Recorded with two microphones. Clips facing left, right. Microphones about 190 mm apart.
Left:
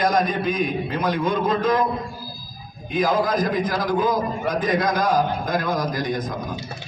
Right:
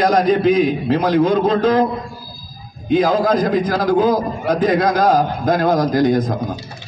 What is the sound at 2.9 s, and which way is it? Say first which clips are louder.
A man's voice: right 6 dB; 65° right (ahead or behind).